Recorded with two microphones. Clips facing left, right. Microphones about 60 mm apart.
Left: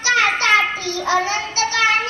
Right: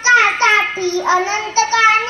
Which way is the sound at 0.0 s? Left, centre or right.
Right.